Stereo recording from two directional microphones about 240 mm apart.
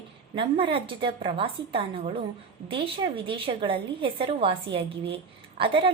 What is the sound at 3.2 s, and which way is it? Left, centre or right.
A woman's voice, right.